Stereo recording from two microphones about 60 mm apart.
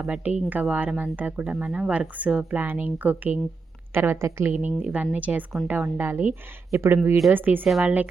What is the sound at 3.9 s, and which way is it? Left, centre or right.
Speech, right.